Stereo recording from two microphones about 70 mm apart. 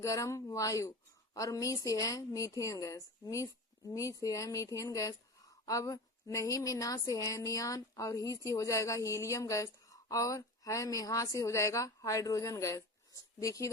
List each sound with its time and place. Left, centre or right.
0.0 s a woman's voice: left